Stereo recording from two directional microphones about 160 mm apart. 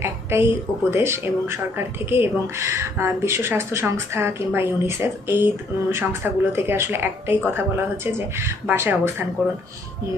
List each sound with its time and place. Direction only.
0.0 s speech: 15° right (ahead or behind)